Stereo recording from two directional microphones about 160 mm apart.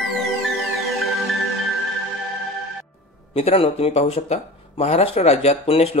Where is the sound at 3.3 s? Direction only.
35° left (ahead or behind).